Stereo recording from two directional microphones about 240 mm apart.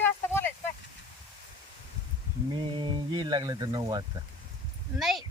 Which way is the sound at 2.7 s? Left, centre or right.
Centre.